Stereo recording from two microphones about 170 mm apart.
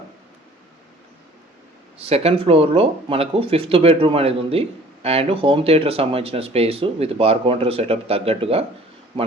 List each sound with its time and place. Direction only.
2.0 s speech: 35° right (ahead or behind)